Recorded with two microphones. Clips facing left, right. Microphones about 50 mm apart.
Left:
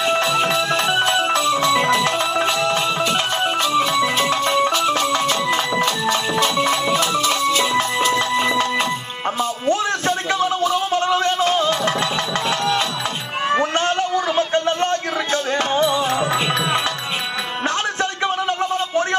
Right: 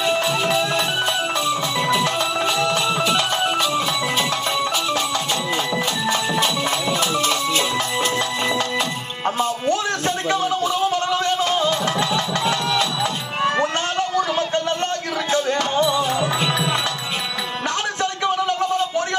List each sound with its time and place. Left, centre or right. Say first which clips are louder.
0.7 s music: left 3 dB; left
2.1 s music: left 2 dB; centre
3.4 s music: left 2 dB; centre
6.6 s music: left 3 dB; centre; by 8.6 s left
9.6 s a sound: left 2 dB; left
11.7 s music: left 1 dB; left
13.7 s a sound: left 2 dB; left
15.5 s music: left 1 dB; left
18.0 s a sound: right 2 dB; left